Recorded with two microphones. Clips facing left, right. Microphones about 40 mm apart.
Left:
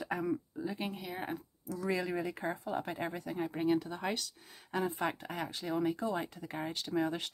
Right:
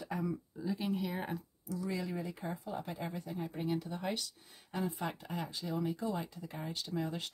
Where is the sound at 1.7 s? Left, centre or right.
Left.